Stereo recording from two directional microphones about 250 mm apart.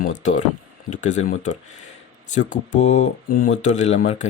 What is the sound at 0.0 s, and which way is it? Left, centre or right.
Speech, left.